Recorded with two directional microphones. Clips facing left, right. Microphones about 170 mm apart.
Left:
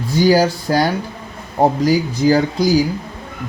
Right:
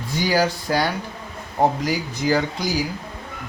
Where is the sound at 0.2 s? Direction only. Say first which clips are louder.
Left 7 dB; 35° left (ahead or behind).